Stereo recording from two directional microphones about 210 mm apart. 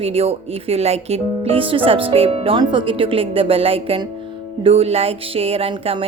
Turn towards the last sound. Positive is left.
turn(degrees=-25)  # may be behind; listen again after turning